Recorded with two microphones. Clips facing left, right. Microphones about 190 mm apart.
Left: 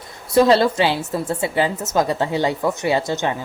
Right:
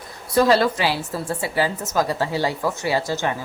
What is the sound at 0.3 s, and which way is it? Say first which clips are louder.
A woman's voice: left 3 dB; 25° left (ahead or behind).